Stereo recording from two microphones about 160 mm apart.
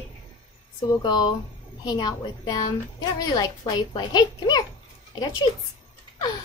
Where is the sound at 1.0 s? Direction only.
25° left (ahead or behind).